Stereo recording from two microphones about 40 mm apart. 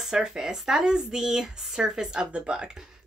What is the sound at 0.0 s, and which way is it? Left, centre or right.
Speech, centre.